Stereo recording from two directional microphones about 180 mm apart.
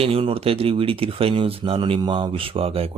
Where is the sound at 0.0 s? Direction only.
30° right (ahead or behind).